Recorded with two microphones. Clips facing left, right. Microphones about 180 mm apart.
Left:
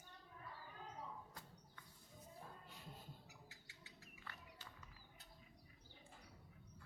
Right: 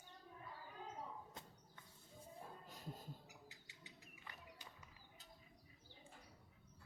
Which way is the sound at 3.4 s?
15° right (ahead or behind).